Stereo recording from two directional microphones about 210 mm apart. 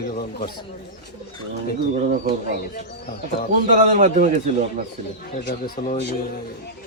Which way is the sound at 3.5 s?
35° right (ahead or behind).